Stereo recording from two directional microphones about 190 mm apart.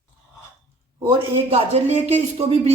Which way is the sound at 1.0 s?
30° right (ahead or behind).